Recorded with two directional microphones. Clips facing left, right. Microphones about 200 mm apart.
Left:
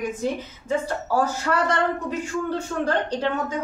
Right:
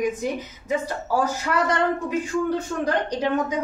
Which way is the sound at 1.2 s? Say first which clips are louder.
Even; 10° right (ahead or behind).